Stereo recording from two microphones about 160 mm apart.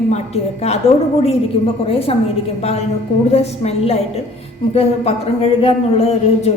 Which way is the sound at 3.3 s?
40° left (ahead or behind).